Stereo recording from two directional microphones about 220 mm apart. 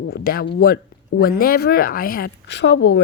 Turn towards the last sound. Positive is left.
turn(degrees=50)  # may be behind; listen again after turning